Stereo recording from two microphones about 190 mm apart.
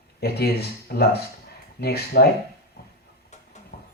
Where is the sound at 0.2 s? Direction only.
55° left (ahead or behind).